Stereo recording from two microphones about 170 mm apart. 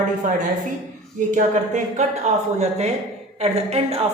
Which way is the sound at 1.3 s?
45° right (ahead or behind).